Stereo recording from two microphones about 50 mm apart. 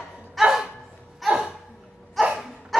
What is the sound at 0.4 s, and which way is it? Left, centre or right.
Dog, centre.